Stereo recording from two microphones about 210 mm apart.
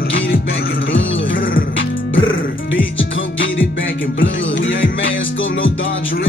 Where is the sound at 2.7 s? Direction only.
65° left (ahead or behind).